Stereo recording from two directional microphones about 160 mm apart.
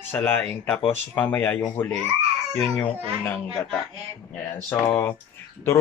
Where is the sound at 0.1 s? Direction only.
15° left (ahead or behind).